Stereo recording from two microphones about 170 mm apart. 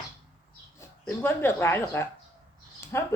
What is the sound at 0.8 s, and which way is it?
Speech, 15° left (ahead or behind).